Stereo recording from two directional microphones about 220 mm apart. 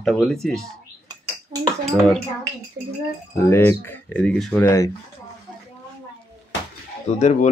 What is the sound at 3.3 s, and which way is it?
Speech, 10° left (ahead or behind).